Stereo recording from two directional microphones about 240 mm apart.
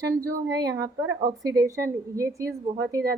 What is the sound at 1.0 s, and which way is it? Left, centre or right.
Speech, right.